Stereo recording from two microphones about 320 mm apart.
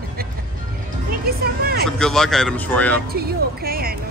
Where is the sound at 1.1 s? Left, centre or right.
Right.